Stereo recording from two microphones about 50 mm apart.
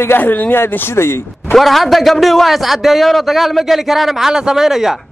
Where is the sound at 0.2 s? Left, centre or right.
Left.